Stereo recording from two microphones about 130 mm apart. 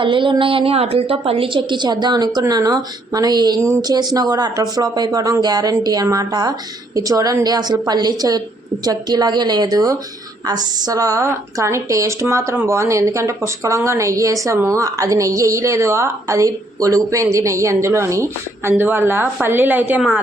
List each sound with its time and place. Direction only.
0.0 s a woman's voice: 40° right (ahead or behind); by 20.2 s 5° right (ahead or behind)